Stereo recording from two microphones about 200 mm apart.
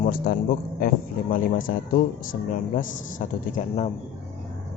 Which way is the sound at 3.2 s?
40° left (ahead or behind).